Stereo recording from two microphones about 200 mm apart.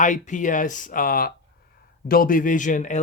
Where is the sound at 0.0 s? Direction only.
40° left (ahead or behind).